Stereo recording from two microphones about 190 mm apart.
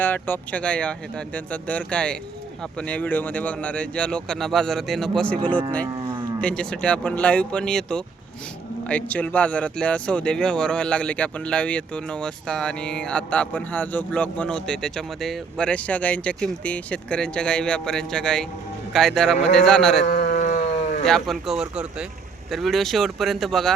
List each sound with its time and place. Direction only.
0.0 s speech: 10° left (ahead or behind)
20.1 s a sound: 45° left (ahead or behind)
21.0 s speech: centre (ahead or behind)